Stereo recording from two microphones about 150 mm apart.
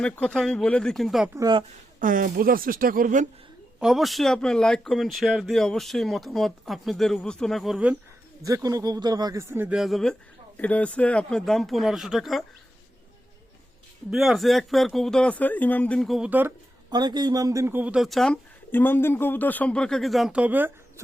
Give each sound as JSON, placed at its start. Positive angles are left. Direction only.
{"t": 0.0, "sound": "speech", "side_deg": 5}
{"t": 1.4, "sound": "speech", "side_deg": -30}
{"t": 2.0, "sound": "speech", "side_deg": -65}
{"t": 3.8, "sound": "speech", "side_deg": 0}
{"t": 8.4, "sound": "speech", "side_deg": -25}
{"t": 14.1, "sound": "speech", "side_deg": 0}
{"t": 16.9, "sound": "speech", "side_deg": -30}
{"t": 18.7, "sound": "a man's voice", "side_deg": 15}